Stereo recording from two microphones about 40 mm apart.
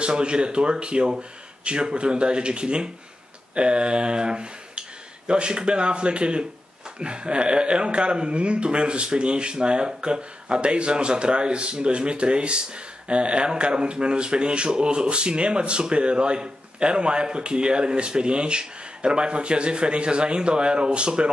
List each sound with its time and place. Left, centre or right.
0.0 s speech: right